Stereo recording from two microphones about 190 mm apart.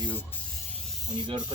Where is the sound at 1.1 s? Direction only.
25° right (ahead or behind).